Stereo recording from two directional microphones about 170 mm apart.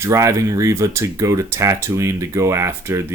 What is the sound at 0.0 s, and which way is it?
Speech, 15° right (ahead or behind).